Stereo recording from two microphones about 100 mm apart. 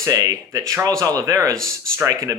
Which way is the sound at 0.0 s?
30° right (ahead or behind).